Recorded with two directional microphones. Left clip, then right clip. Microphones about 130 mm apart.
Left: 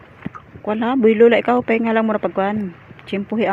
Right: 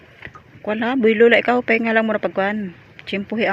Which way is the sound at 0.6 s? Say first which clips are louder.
Left 2 dB; 10° right (ahead or behind).